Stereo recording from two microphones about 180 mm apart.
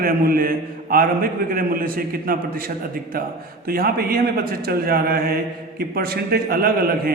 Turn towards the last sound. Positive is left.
turn(degrees=-55)  # may be behind; listen again after turning